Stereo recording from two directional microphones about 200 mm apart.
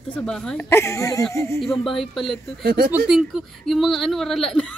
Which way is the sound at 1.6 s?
Centre (ahead or behind).